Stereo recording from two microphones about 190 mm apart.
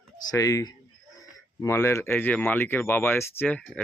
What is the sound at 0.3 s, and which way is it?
Speech, 15° left (ahead or behind).